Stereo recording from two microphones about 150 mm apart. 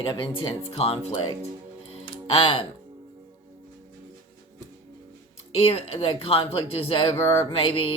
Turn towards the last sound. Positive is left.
turn(degrees=40)  # may be behind; listen again after turning